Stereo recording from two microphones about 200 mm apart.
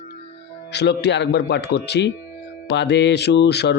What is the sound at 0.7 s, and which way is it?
Speech, 55° left (ahead or behind).